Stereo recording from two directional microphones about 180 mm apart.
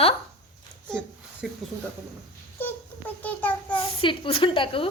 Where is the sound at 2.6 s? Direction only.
10° left (ahead or behind).